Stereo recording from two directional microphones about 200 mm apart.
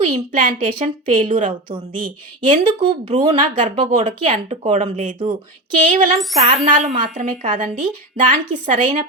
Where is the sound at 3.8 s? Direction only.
40° right (ahead or behind).